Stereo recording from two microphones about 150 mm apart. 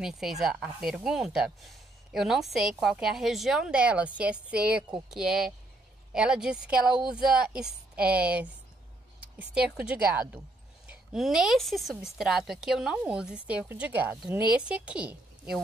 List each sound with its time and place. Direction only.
0.0 s a woman's voice: 5° right (ahead or behind)